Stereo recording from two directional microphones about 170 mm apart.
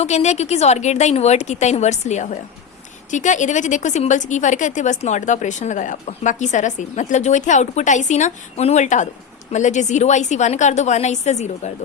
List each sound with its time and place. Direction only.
0.0 s a woman's voice: 40° left (ahead or behind)